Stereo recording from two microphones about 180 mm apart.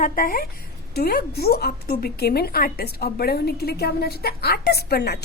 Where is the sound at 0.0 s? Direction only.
50° left (ahead or behind).